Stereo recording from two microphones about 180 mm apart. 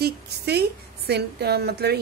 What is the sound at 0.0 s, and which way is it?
A woman's voice, 65° right (ahead or behind).